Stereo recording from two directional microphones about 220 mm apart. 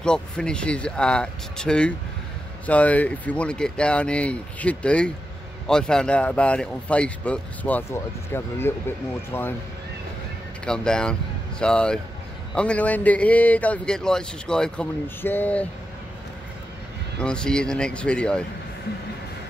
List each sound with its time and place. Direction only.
0.0 s speech: 5° left (ahead or behind)
10.6 s a man's voice: 5° left (ahead or behind)
17.2 s speech: 5° left (ahead or behind)